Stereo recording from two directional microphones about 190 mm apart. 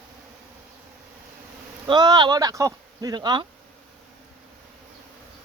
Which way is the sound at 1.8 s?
20° right (ahead or behind).